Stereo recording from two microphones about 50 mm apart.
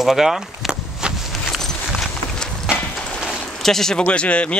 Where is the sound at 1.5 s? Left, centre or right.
Centre.